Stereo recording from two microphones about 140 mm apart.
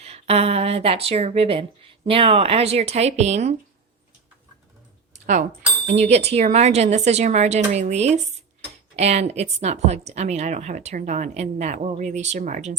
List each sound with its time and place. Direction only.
0.0 s a woman's voice: 45° right (ahead or behind)
5.2 s speech: 65° right (ahead or behind)
5.9 s a woman's voice: 50° right (ahead or behind); by 12.7 s 65° right (ahead or behind)